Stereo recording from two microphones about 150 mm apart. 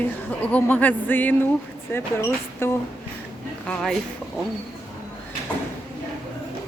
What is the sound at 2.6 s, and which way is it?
Speech, 15° left (ahead or behind).